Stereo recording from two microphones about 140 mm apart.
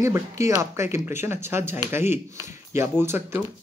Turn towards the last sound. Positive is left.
turn(degrees=-15)  # may be behind; listen again after turning